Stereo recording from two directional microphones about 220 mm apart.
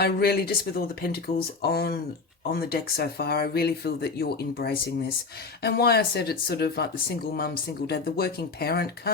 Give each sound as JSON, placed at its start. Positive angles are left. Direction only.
{"t": 0.0, "sound": "speech", "side_deg": 45}